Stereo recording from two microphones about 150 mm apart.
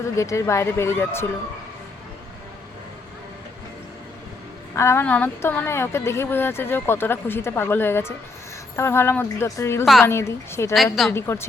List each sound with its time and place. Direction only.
0.0 s speech: 20° left (ahead or behind)
4.8 s a woman's voice: 15° left (ahead or behind)
9.8 s a woman's voice: centre (ahead or behind)
10.1 s a woman's voice: 15° left (ahead or behind)